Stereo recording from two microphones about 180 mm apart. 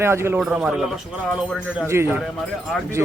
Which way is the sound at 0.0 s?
15° right (ahead or behind).